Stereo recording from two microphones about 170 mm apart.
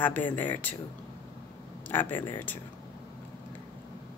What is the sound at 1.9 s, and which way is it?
Speech, 10° left (ahead or behind).